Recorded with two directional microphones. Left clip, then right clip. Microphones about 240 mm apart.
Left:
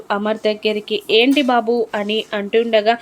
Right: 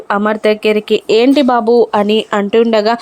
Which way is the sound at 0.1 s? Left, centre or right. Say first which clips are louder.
Right 6 dB; right.